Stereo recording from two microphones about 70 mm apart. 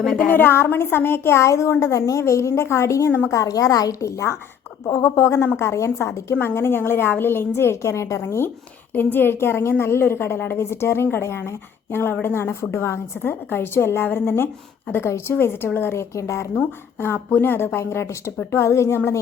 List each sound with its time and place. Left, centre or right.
0.0 s a woman's voice: centre
0.3 s a woman's voice: left
3.1 s a woman's voice: left
3.3 s a woman's voice: left
8.2 s a woman's voice: left
16.6 s a woman's voice: left